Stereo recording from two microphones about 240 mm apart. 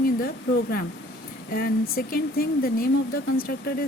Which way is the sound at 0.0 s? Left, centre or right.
Left.